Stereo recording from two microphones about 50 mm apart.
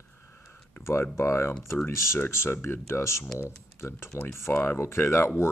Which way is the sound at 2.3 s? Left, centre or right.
Left.